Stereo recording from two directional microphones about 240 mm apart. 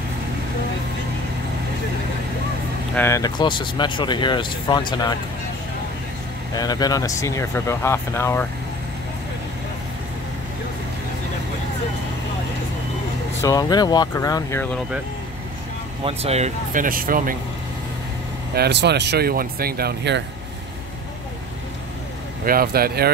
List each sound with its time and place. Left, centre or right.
2.9 s speech: centre
6.5 s speech: centre
13.4 s speech: centre
16.0 s speech: right
18.5 s speech: right
22.4 s speech: right